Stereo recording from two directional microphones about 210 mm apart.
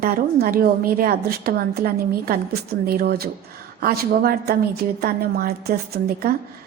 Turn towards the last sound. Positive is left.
turn(degrees=-50)  # may be behind; listen again after turning